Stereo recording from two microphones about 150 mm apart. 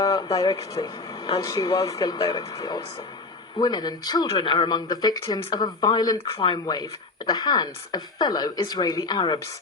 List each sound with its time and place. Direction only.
0.0 s speech: 25° left (ahead or behind)